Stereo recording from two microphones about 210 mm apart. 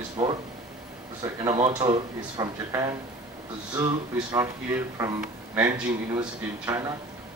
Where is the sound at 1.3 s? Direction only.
20° right (ahead or behind).